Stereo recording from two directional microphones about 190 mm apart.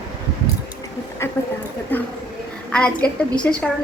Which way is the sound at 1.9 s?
10° left (ahead or behind).